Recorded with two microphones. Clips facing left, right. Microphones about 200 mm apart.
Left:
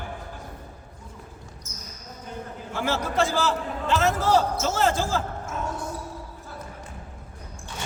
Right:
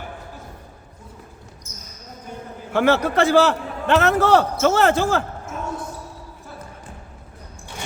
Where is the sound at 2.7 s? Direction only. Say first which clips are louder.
Right 7 dB; 65° right (ahead or behind).